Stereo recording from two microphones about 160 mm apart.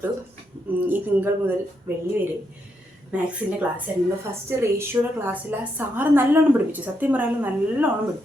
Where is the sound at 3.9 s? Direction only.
10° right (ahead or behind).